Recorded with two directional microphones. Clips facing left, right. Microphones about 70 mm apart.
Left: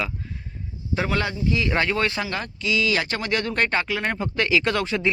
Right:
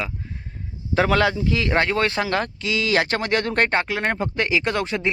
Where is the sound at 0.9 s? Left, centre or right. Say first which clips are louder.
Right 6 dB; right.